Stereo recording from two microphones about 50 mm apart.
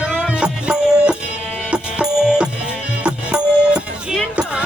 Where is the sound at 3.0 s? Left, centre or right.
Right.